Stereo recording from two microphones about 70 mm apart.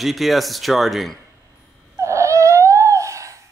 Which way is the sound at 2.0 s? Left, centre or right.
Right.